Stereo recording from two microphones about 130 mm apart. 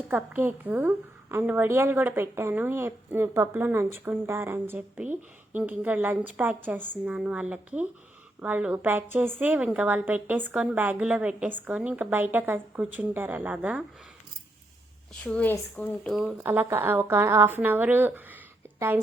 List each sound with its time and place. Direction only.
0.1 s a woman's voice: 15° right (ahead or behind)
15.2 s speech: 10° left (ahead or behind)
16.4 s a woman's voice: 15° right (ahead or behind)